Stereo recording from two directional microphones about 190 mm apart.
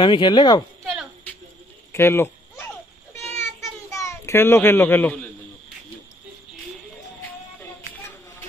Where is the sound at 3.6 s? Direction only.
15° left (ahead or behind).